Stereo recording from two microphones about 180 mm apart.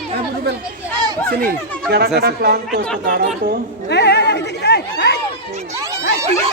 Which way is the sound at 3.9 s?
65° left (ahead or behind).